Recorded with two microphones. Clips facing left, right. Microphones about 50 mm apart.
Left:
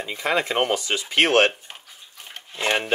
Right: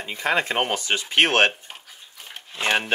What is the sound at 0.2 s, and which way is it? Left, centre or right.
Speech, right.